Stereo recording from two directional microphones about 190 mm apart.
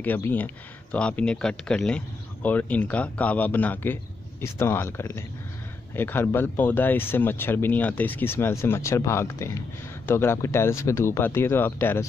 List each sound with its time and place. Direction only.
0.0 s speech: 10° left (ahead or behind)